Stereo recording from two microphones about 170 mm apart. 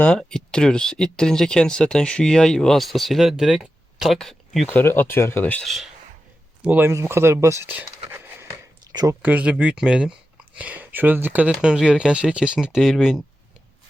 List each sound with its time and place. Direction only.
0.0 s speech: 5° left (ahead or behind)
4.7 s speech: 10° left (ahead or behind)
6.7 s speech: 15° right (ahead or behind)
8.1 s a sound: 15° right (ahead or behind)
8.9 s speech: 25° right (ahead or behind)
9.2 s speech: 10° right (ahead or behind)